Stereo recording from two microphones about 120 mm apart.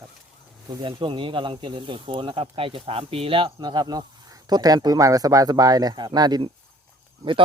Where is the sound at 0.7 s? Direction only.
45° right (ahead or behind).